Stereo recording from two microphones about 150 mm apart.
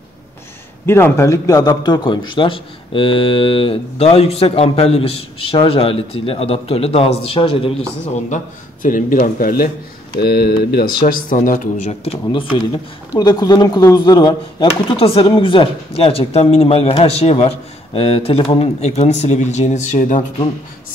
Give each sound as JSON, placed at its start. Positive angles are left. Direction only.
{"t": 0.8, "sound": "a man's voice", "side_deg": 15}
{"t": 8.8, "sound": "speech", "side_deg": 60}
{"t": 10.2, "sound": "speech", "side_deg": 90}
{"t": 11.1, "sound": "speech", "side_deg": 70}
{"t": 12.5, "sound": "a man's voice", "side_deg": 25}